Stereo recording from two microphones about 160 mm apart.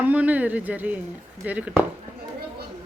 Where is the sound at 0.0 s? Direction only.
10° right (ahead or behind).